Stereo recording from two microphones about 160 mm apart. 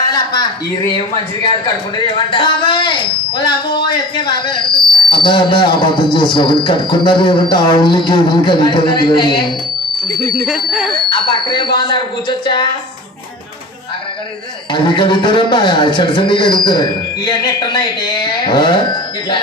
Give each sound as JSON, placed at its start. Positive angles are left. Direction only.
{"t": 0.0, "sound": "speech", "side_deg": 25}
{"t": 2.0, "sound": "a man's voice", "side_deg": 30}
{"t": 10.4, "sound": "speech", "side_deg": -5}
{"t": 11.1, "sound": "a man's voice", "side_deg": 30}
{"t": 14.7, "sound": "a man's voice", "side_deg": 30}